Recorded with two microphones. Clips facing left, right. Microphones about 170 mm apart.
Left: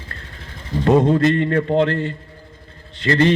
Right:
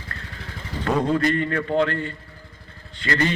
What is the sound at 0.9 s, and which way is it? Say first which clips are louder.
A man's voice: left 6 dB; 25° left (ahead or behind).